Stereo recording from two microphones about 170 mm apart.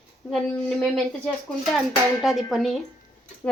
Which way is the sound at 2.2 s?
Centre (ahead or behind).